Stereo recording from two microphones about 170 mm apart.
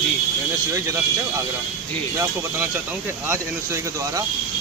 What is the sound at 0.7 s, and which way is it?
Speech, 15° right (ahead or behind).